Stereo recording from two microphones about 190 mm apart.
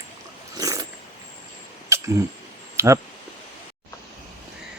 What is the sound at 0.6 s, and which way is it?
Roaring cats, 20° right (ahead or behind).